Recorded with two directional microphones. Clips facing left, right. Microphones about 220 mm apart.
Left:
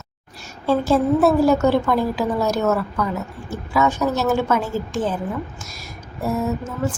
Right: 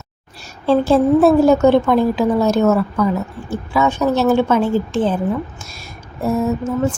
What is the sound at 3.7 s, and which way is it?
A woman's voice, 30° right (ahead or behind).